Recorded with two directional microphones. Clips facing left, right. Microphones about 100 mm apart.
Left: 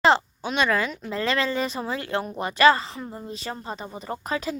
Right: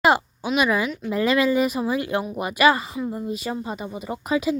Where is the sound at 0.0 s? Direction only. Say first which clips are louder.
Right 1 dB; 10° right (ahead or behind).